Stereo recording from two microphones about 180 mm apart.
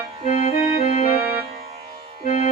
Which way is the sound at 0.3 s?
35° left (ahead or behind).